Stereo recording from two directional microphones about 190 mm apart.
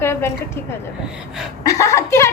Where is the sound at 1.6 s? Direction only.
15° left (ahead or behind).